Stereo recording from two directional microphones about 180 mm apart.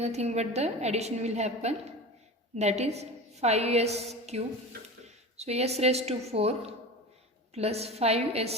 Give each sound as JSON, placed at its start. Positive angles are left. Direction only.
{"t": 0.0, "sound": "a woman's voice", "side_deg": -35}
{"t": 7.5, "sound": "a woman's voice", "side_deg": -35}